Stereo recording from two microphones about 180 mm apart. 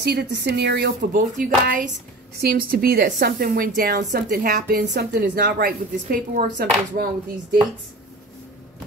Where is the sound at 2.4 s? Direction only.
55° right (ahead or behind).